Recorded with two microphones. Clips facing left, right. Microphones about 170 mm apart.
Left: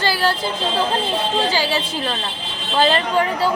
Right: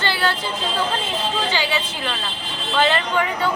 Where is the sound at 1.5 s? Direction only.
35° left (ahead or behind).